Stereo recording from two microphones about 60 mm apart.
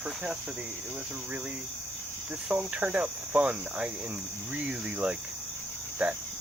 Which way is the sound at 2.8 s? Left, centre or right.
Right.